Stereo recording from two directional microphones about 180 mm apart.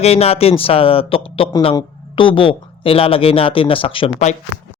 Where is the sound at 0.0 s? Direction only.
35° left (ahead or behind).